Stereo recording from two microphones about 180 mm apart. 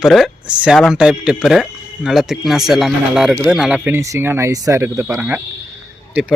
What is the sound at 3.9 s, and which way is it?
Speech, 15° right (ahead or behind).